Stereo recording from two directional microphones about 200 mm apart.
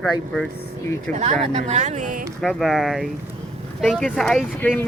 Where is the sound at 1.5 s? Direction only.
35° right (ahead or behind).